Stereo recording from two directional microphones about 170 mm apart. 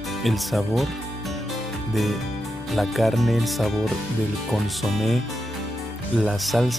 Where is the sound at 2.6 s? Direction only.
Centre (ahead or behind).